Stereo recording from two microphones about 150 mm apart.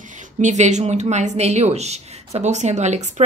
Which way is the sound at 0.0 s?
55° right (ahead or behind).